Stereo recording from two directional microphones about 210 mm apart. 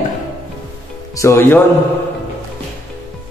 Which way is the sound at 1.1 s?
15° left (ahead or behind).